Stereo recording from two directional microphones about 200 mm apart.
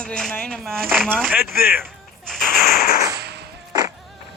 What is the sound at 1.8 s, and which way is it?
Music, 5° left (ahead or behind).